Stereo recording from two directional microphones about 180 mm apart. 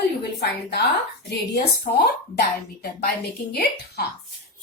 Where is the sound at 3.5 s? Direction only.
60° left (ahead or behind).